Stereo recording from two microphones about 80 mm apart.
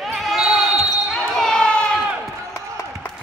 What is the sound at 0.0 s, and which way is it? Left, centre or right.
Basketball bounce, centre.